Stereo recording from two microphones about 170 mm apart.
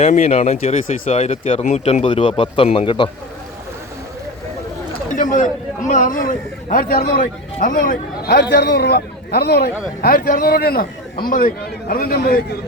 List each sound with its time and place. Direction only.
0.0 s speech: 40° left (ahead or behind)
5.1 s a sound: 50° left (ahead or behind)
5.9 s a man's voice: 50° left (ahead or behind)